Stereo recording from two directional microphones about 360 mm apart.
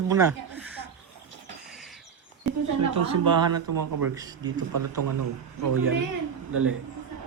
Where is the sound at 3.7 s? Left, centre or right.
Right.